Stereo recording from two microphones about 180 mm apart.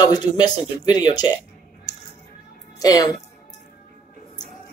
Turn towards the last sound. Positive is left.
turn(degrees=20)  # may be behind; listen again after turning